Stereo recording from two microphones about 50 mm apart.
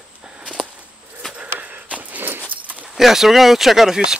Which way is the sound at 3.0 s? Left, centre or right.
Centre.